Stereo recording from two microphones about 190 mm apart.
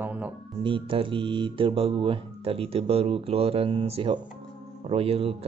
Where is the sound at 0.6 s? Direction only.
25° right (ahead or behind).